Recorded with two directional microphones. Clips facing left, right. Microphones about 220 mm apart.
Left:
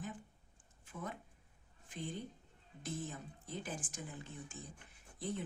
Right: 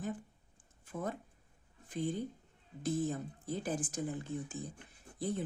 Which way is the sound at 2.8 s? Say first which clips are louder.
Right 10 dB; 35° right (ahead or behind).